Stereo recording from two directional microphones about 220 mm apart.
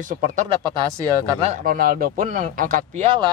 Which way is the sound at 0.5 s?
20° right (ahead or behind).